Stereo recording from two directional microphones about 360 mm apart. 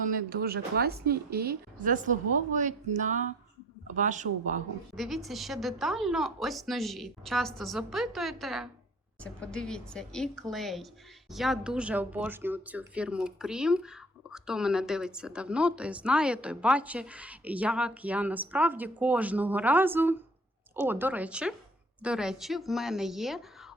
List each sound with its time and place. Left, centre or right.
0.0 s a woman's voice: right
4.9 s speech: centre